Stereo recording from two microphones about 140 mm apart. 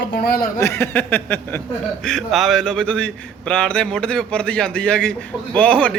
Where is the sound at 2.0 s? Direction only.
5° left (ahead or behind).